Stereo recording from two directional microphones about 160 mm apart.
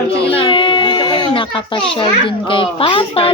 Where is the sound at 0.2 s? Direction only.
35° left (ahead or behind).